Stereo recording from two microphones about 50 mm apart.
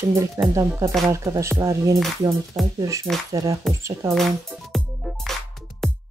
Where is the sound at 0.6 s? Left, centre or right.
Right.